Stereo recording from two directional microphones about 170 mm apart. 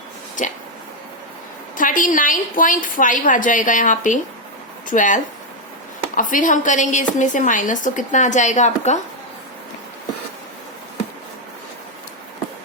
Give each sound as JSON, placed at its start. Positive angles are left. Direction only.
{"t": 0.4, "sound": "a woman's voice", "side_deg": 50}
{"t": 1.7, "sound": "a woman's voice", "side_deg": 50}